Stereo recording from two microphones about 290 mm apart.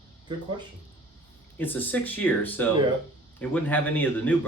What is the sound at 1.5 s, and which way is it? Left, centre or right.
Speech, centre.